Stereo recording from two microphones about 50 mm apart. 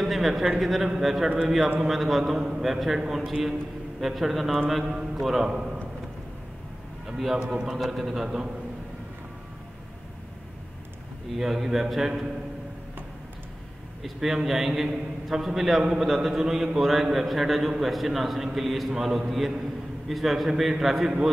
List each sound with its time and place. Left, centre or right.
0.0 s a man's voice: centre
7.1 s a sound: centre
7.3 s a man's voice: centre
7.7 s a man's voice: centre
11.3 s a man's voice: centre
14.0 s a man's voice: centre